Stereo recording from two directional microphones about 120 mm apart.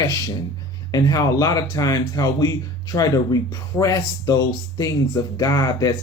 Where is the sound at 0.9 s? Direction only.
30° left (ahead or behind).